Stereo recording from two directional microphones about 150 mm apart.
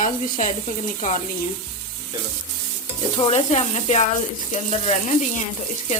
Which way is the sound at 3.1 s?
40° left (ahead or behind).